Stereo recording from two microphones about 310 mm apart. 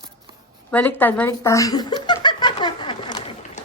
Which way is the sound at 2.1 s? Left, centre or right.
Centre.